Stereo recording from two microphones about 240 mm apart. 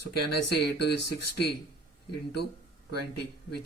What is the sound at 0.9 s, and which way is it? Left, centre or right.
Speech, left.